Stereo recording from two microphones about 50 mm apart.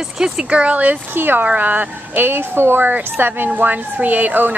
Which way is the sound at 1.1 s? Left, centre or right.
Right.